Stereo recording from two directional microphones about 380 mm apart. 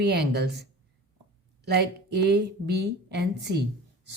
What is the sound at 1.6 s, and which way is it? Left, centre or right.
A woman's voice, right.